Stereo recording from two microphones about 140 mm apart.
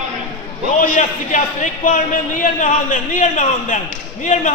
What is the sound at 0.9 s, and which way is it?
Speech, 65° left (ahead or behind).